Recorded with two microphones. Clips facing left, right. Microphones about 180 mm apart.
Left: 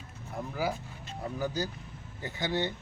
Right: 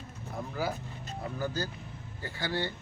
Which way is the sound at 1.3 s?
15° left (ahead or behind).